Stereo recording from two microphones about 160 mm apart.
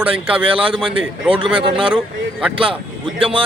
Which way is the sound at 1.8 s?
5° right (ahead or behind).